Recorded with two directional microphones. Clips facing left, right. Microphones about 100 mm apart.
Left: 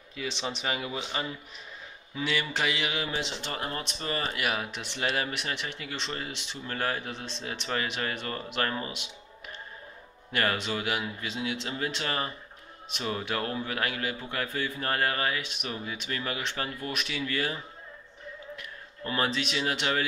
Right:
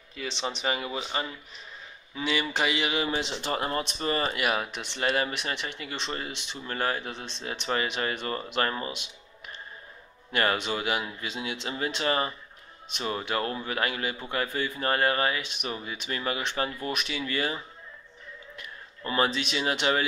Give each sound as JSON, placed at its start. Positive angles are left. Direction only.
{"t": 0.1, "sound": "a man's voice", "side_deg": 5}
{"t": 4.0, "sound": "a man's voice", "side_deg": -15}
{"t": 4.4, "sound": "a man's voice", "side_deg": -5}
{"t": 10.3, "sound": "a man's voice", "side_deg": -5}
{"t": 18.6, "sound": "speech", "side_deg": -5}